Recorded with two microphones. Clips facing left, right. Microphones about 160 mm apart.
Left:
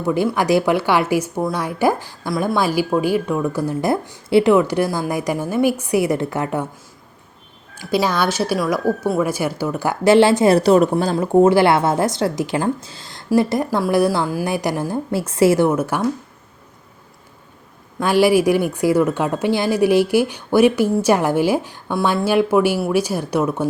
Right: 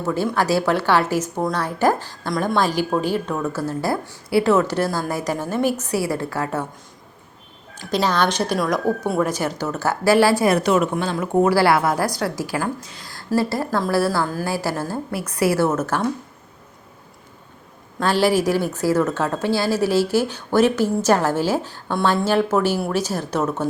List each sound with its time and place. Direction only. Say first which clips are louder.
0.0 s a woman's voice: left 3 dB; 15° left (ahead or behind)
7.8 s a woman's voice: left 1 dB; 10° left (ahead or behind)
18.0 s a woman's voice: left 4 dB; 10° left (ahead or behind)